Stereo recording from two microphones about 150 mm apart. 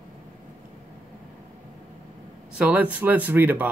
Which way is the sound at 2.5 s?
10° right (ahead or behind).